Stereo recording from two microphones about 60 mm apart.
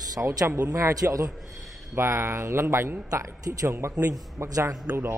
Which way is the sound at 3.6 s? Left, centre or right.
Right.